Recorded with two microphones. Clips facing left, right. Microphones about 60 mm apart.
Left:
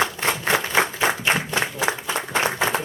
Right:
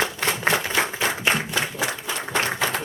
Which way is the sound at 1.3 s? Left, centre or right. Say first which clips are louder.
Left 2 dB; left.